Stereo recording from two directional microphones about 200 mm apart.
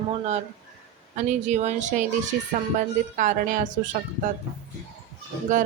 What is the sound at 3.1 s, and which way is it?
Speech, 40° right (ahead or behind).